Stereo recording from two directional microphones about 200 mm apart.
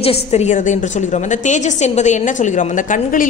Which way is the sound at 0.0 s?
30° left (ahead or behind).